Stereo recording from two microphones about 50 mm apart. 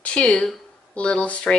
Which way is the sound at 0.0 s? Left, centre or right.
Left.